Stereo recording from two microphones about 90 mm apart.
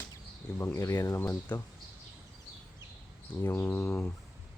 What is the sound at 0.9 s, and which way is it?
Speech, 35° left (ahead or behind).